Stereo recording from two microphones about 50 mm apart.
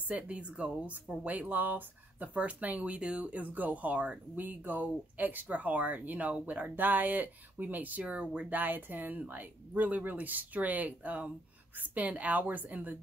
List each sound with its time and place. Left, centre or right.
0.1 s speech: right
3.0 s speech: right
8.5 s speech: right